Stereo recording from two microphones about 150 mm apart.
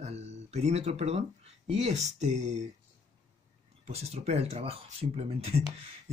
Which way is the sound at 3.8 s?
45° right (ahead or behind).